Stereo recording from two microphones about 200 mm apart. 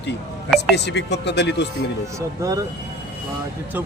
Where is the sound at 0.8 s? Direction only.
60° left (ahead or behind).